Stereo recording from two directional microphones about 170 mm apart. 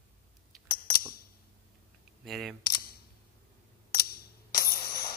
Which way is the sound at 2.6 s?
60° left (ahead or behind).